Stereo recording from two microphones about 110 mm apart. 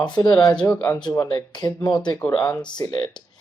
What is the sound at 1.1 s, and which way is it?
Speech, 35° left (ahead or behind).